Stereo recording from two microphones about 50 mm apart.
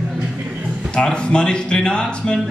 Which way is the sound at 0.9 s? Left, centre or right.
Centre.